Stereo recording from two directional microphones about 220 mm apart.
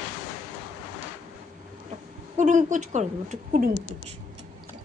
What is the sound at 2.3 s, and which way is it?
A woman's voice, 35° right (ahead or behind).